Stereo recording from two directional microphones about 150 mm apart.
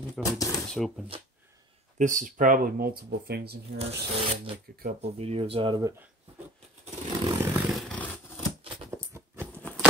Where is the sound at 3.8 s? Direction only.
40° right (ahead or behind).